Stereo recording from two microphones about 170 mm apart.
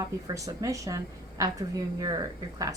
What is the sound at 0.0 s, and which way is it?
Speech, 20° right (ahead or behind).